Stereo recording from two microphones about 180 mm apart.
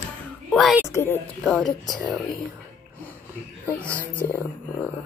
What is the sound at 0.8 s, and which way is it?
Speech, 15° left (ahead or behind).